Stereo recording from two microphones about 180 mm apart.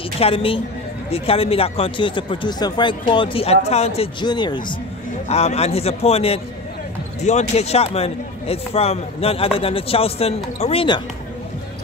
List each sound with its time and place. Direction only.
0.2 s speech: 30° left (ahead or behind)
5.3 s speech: 35° left (ahead or behind)